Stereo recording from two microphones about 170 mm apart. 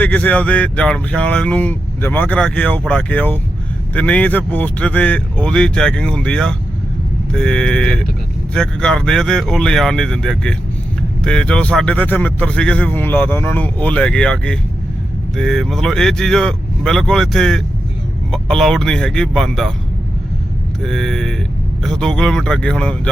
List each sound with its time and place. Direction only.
0.0 s speech: 10° left (ahead or behind)
20.8 s speech: centre (ahead or behind)